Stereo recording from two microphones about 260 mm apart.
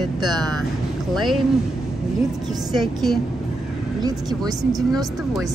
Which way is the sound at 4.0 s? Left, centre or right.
Centre.